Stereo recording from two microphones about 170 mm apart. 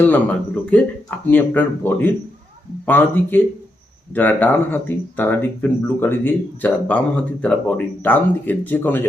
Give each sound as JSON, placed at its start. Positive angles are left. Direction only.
{"t": 0.0, "sound": "speech", "side_deg": 10}